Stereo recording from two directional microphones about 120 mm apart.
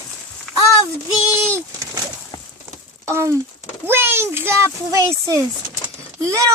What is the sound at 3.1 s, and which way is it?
A child's voice, 20° right (ahead or behind).